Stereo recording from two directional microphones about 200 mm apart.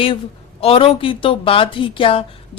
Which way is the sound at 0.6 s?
30° left (ahead or behind).